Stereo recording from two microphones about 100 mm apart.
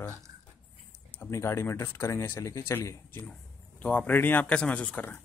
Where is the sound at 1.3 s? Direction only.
25° left (ahead or behind).